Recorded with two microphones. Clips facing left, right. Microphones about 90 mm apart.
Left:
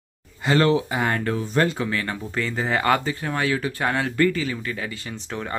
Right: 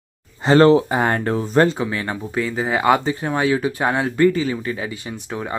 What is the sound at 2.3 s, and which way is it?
Speech, 10° right (ahead or behind).